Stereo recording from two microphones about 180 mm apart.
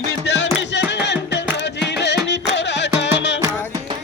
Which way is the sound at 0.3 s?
75° left (ahead or behind).